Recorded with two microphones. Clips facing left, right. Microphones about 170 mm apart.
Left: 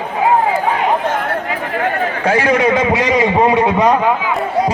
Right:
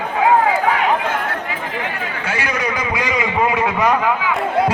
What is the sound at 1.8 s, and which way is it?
Speech, 50° left (ahead or behind).